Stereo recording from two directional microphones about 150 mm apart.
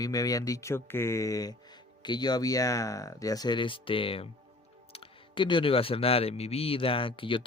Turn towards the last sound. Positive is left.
turn(degrees=35)  # may be behind; listen again after turning